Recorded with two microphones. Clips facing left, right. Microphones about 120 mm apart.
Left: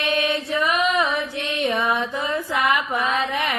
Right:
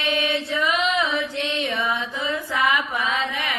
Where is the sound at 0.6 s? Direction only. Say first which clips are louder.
Left 2 dB; 45° left (ahead or behind).